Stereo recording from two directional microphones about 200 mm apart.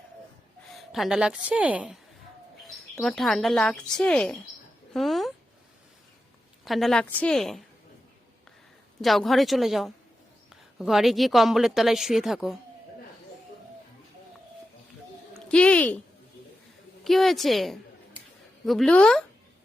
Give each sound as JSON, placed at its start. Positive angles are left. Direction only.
{"t": 0.7, "sound": "a woman's voice", "side_deg": 0}
{"t": 4.9, "sound": "a sound", "side_deg": 0}
{"t": 6.7, "sound": "a woman's voice", "side_deg": 0}
{"t": 9.0, "sound": "a woman's voice", "side_deg": 0}
{"t": 15.4, "sound": "speech", "side_deg": 5}
{"t": 17.0, "sound": "a woman's voice", "side_deg": 0}